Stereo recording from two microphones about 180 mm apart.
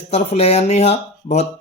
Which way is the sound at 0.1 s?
35° left (ahead or behind).